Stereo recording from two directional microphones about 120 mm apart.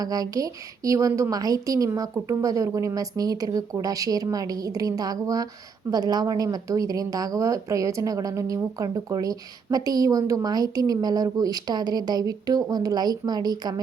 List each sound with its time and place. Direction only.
0.0 s a woman's voice: 30° right (ahead or behind)